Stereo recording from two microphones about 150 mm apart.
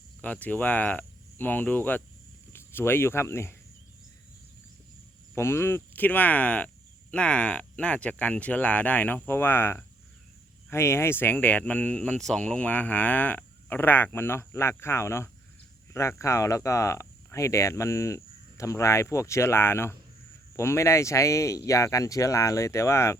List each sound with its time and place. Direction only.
0.2 s speech: 10° left (ahead or behind)
5.3 s speech: 15° left (ahead or behind)